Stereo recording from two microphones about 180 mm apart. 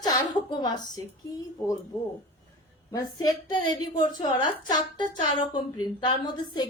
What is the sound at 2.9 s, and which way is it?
A woman's voice, 20° left (ahead or behind).